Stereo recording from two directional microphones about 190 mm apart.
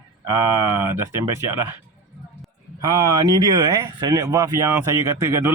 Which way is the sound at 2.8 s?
20° right (ahead or behind).